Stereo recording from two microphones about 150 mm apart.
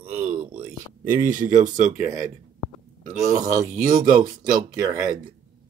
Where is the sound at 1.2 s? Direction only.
65° right (ahead or behind).